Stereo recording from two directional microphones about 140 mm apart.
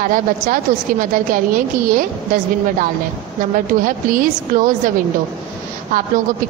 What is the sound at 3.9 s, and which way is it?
Speech, 80° right.